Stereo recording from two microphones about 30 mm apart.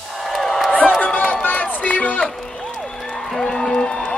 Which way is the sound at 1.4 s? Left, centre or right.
Left.